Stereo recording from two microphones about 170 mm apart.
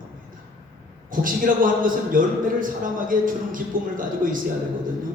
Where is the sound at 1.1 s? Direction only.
55° right (ahead or behind).